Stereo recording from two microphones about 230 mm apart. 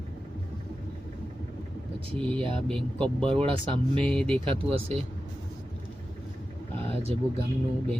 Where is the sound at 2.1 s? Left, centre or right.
Centre.